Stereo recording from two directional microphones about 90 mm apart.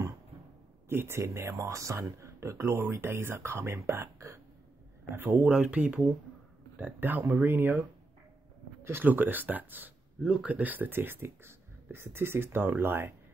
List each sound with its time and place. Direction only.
0.8 s speech: 25° right (ahead or behind)
5.4 s speech: 10° right (ahead or behind)
8.8 s speech: 25° right (ahead or behind)